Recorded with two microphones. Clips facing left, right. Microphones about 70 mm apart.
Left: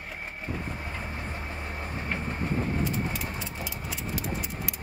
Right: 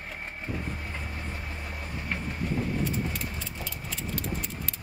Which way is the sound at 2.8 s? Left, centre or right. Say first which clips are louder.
Left 1 dB; centre.